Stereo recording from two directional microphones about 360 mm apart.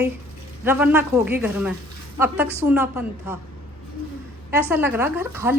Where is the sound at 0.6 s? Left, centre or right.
Centre.